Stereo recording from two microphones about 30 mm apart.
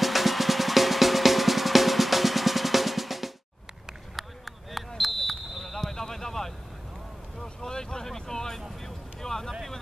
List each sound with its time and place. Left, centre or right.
0.0 s drum: centre
4.7 s basketball bounce: centre
7.3 s vehicle: left